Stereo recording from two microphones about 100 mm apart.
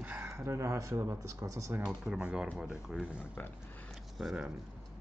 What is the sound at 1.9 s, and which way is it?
Speech, 10° right (ahead or behind).